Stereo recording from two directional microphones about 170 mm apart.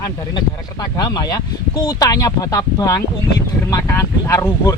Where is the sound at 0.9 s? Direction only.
25° left (ahead or behind).